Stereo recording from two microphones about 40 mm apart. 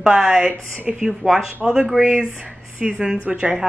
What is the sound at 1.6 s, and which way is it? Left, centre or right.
A woman's voice, centre.